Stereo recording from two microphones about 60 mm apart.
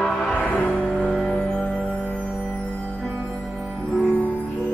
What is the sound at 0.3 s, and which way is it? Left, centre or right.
Music, left.